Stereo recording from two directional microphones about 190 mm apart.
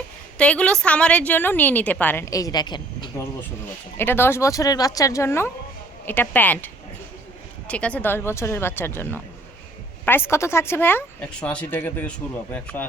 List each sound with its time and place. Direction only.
0.3 s a woman's voice: 5° left (ahead or behind); by 3.1 s 25° left (ahead or behind)
3.9 s a woman's voice: 10° left (ahead or behind)
7.7 s a woman's voice: 5° left (ahead or behind)